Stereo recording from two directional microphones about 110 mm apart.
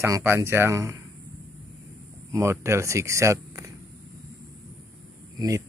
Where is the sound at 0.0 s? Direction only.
25° right (ahead or behind).